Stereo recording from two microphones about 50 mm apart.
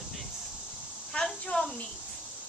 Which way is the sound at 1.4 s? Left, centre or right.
Centre.